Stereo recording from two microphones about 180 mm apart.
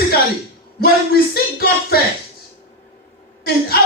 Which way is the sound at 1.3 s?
60° left (ahead or behind).